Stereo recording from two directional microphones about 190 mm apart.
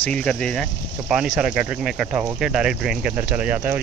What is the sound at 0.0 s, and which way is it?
Speech, 5° left (ahead or behind).